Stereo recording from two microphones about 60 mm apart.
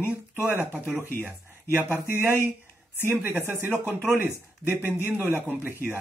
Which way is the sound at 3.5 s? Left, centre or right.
Right.